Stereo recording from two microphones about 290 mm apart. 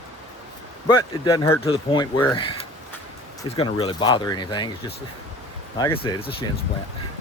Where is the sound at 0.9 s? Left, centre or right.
Centre.